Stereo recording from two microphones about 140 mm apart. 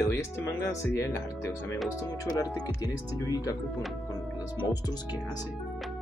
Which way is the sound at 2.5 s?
25° left (ahead or behind).